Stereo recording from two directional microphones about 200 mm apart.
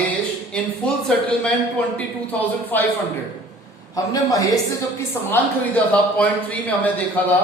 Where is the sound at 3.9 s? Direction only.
20° left (ahead or behind).